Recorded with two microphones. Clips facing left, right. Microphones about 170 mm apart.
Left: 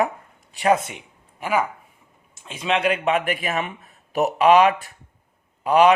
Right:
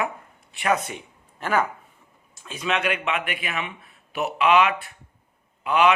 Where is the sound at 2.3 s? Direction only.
25° left (ahead or behind).